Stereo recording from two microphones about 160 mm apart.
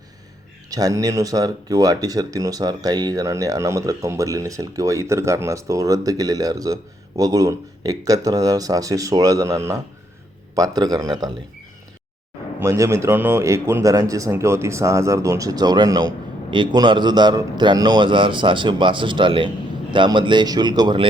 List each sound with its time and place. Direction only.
0.7 s speech: 20° right (ahead or behind)
12.5 s speech: 20° right (ahead or behind)